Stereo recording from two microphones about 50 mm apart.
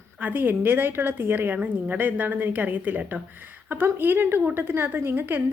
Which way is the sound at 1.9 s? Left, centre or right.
Right.